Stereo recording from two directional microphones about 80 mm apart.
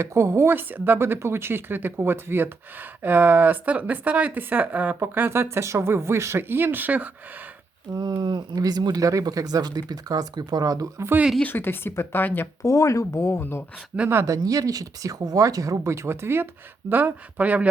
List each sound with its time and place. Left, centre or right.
0.0 s speech: right
7.9 s speech: right
11.4 s speech: left
12.6 s speech: left
14.3 s speech: right; by 17.7 s centre